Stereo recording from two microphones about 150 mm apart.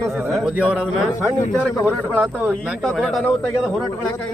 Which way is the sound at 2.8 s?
5° left (ahead or behind).